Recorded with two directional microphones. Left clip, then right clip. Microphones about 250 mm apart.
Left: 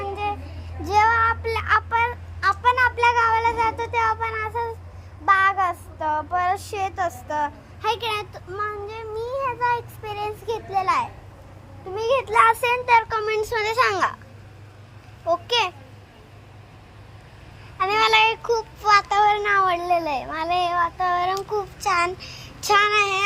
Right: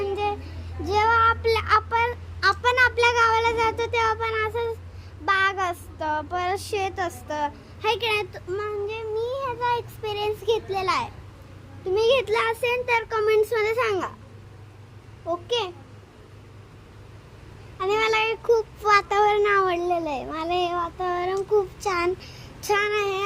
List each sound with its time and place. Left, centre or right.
0.9 s child singing: centre
11.9 s a child's voice: centre
15.3 s a child's voice: centre
17.7 s a sound: centre
18.4 s a child's voice: right; by 23.2 s centre